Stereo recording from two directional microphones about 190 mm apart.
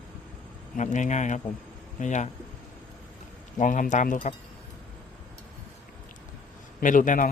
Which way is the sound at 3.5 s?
40° left (ahead or behind).